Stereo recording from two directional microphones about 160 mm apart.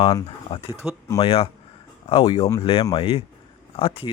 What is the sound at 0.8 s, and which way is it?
Speech, 5° right (ahead or behind).